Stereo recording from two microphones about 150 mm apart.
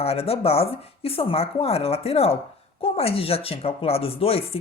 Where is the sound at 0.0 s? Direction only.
40° left (ahead or behind).